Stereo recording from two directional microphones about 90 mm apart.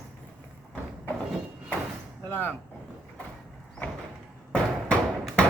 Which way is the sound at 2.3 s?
20° left (ahead or behind).